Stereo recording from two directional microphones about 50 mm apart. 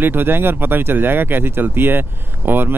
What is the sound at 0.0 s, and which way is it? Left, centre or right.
Speech, right.